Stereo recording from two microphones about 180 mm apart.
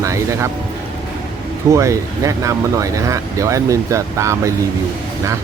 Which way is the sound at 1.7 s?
15° right (ahead or behind).